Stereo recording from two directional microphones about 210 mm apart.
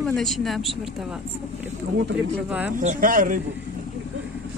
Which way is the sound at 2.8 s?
40° right (ahead or behind).